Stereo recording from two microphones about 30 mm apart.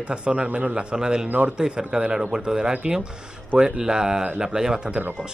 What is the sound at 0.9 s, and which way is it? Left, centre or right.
Speech, right.